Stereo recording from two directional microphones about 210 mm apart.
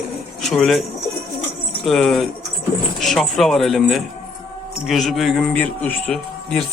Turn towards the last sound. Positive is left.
turn(degrees=0)  # may be behind; listen again after turning